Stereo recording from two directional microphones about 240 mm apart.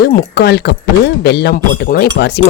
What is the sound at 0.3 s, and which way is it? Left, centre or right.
Speech, left.